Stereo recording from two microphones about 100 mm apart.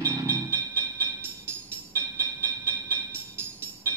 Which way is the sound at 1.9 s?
25° right (ahead or behind).